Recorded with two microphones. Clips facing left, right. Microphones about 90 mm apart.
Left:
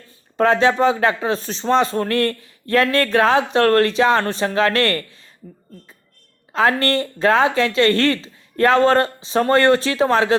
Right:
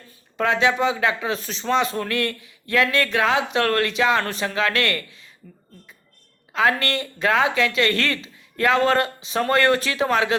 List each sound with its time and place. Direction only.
0.3 s speech: 40° left (ahead or behind)
6.5 s speech: 35° left (ahead or behind)